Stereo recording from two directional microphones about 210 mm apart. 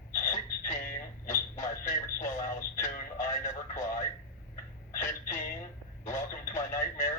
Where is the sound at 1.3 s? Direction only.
40° left (ahead or behind).